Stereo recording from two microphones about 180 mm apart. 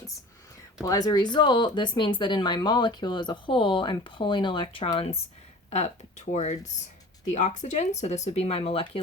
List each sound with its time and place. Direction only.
0.8 s speech: 20° left (ahead or behind)